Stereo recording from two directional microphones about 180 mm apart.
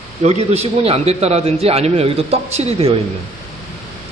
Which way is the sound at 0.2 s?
35° right (ahead or behind).